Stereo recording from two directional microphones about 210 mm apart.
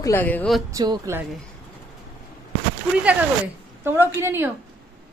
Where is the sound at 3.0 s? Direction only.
5° right (ahead or behind).